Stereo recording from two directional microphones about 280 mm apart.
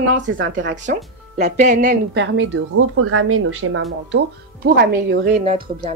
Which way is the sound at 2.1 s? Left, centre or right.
Right.